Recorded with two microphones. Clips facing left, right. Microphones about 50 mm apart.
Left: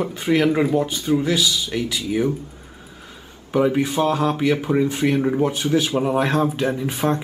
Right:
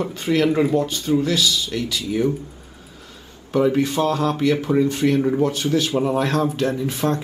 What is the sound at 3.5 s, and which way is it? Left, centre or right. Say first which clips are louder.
A man's voice: even; centre.